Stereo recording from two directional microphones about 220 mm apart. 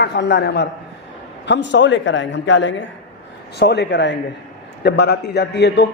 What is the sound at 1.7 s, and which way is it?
A man's voice, 55° left (ahead or behind).